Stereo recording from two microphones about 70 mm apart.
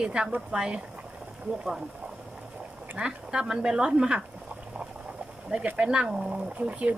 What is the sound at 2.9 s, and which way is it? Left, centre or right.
Speech, centre.